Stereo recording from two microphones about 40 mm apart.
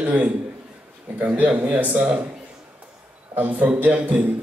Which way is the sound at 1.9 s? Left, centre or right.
Right.